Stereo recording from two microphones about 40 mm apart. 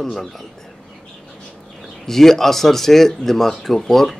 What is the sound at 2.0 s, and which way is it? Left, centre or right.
Speech, centre.